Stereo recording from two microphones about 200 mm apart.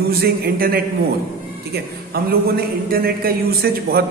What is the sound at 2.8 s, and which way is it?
A man's voice, 50° right (ahead or behind).